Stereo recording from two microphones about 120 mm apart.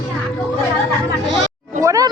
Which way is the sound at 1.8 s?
25° right (ahead or behind).